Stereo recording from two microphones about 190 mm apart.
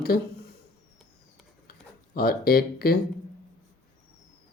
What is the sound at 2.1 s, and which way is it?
Speech, 55° left (ahead or behind).